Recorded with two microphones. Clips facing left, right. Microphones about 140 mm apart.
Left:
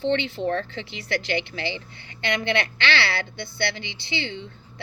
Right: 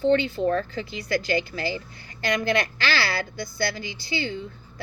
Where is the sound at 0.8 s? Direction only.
25° left (ahead or behind).